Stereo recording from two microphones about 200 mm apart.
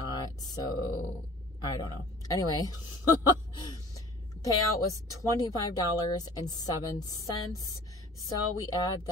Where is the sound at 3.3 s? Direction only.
20° left (ahead or behind).